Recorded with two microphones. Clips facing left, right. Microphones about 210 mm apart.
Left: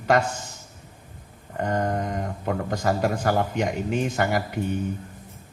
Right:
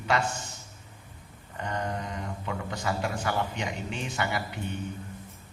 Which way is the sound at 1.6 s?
45° left (ahead or behind).